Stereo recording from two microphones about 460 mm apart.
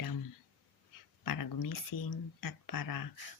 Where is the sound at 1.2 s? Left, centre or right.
Left.